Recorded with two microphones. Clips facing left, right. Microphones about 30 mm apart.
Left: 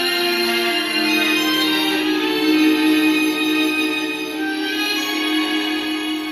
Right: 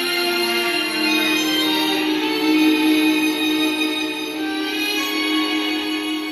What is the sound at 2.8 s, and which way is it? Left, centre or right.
Music, left.